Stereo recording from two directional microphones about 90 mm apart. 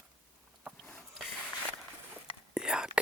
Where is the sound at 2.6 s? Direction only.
10° right (ahead or behind).